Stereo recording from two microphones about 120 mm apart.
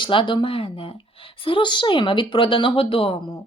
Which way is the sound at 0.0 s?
45° left (ahead or behind).